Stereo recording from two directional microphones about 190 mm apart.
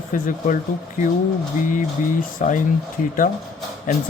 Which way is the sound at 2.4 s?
45° left (ahead or behind).